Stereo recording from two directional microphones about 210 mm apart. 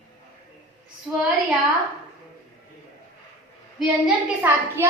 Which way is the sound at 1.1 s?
5° right (ahead or behind).